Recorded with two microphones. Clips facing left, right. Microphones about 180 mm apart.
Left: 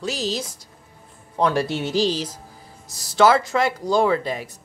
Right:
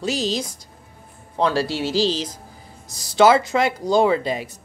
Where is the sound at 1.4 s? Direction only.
20° left (ahead or behind); by 3.2 s 5° left (ahead or behind).